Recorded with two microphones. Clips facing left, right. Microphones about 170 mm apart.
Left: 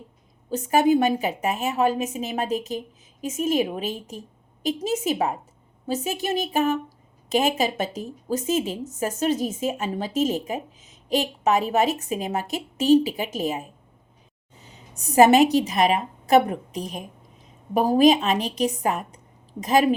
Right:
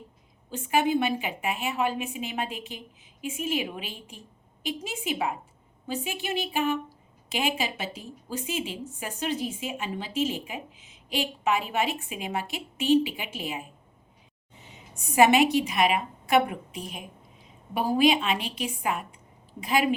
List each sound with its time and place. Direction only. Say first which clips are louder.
0.5 s a woman's voice: left 6 dB; 40° left (ahead or behind)
14.6 s a sound: left 3 dB; 40° left (ahead or behind)
15.5 s a woman's voice: left 4 dB; 40° left (ahead or behind)